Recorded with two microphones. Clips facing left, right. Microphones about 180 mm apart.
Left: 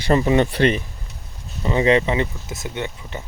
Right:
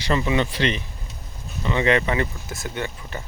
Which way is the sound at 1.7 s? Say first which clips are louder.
Left 3 dB; 35° left (ahead or behind).